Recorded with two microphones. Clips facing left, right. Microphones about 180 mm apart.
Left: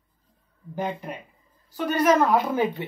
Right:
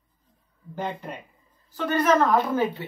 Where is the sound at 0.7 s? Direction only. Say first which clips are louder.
Left 2 dB; 10° left (ahead or behind).